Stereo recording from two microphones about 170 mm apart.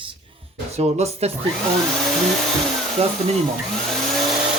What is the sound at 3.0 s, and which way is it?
Speech, 40° right (ahead or behind).